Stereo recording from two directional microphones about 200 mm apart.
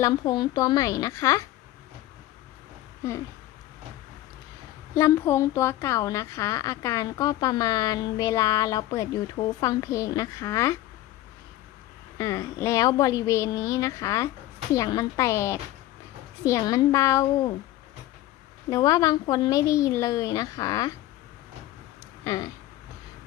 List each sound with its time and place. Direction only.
0.0 s a woman's voice: 20° left (ahead or behind)
4.9 s a woman's voice: 15° left (ahead or behind)
12.1 s a woman's voice: 15° left (ahead or behind)
18.7 s a woman's voice: 20° left (ahead or behind)
22.2 s speech: 20° left (ahead or behind)